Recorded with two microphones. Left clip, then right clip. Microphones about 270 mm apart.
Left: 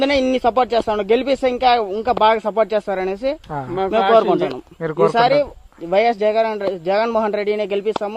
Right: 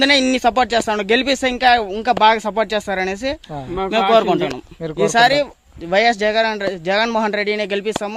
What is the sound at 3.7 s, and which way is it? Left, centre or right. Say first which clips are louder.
Speech: even; right.